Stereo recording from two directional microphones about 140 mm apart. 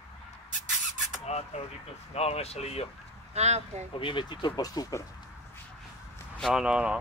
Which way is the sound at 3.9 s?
35° left (ahead or behind).